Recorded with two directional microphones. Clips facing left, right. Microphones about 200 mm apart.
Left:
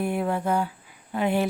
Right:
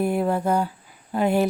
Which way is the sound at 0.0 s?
40° right (ahead or behind).